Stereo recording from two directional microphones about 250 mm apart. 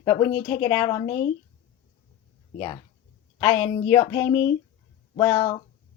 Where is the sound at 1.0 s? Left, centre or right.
Left.